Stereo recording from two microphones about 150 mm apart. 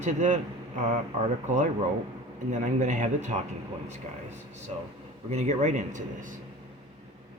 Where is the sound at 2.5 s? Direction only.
55° right (ahead or behind).